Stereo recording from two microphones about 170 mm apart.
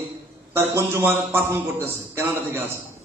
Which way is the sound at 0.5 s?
15° right (ahead or behind).